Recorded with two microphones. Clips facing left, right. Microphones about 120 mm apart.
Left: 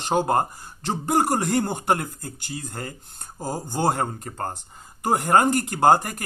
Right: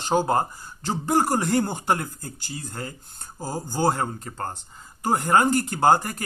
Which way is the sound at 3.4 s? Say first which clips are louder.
Even; 25° left (ahead or behind).